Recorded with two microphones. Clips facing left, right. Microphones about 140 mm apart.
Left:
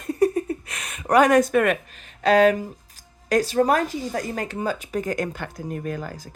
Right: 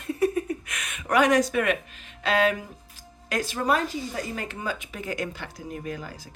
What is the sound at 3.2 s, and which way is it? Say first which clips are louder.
Speech: left 6 dB; 40° left (ahead or behind).